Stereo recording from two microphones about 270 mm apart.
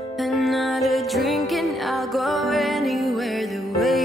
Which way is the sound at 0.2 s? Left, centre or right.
Centre.